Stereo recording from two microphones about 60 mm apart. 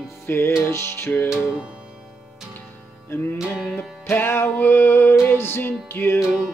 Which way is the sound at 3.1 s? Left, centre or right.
Left.